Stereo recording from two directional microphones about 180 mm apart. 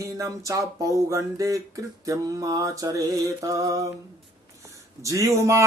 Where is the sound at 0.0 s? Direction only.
20° right (ahead or behind).